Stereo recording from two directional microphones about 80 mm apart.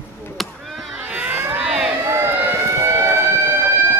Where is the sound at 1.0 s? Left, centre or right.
Right.